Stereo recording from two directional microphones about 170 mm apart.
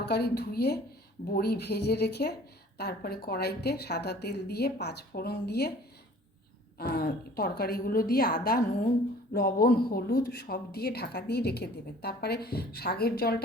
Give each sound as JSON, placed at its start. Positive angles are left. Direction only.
{"t": 0.0, "sound": "a woman's voice", "side_deg": 70}
{"t": 6.7, "sound": "a woman's voice", "side_deg": 65}